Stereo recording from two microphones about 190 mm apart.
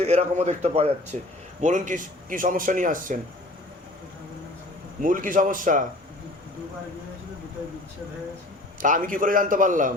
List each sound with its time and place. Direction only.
0.0 s a man's voice: 35° right (ahead or behind)
5.0 s speech: 45° right (ahead or behind)
8.8 s speech: 45° right (ahead or behind)